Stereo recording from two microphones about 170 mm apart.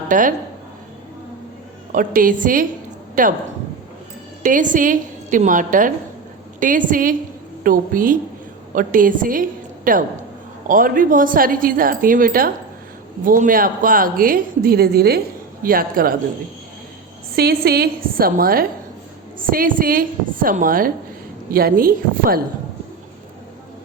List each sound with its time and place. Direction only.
0.1 s a woman's voice: 50° right (ahead or behind)
1.9 s a woman's voice: 55° right (ahead or behind)
4.4 s a woman's voice: 50° right (ahead or behind)
17.3 s speech: 65° right (ahead or behind)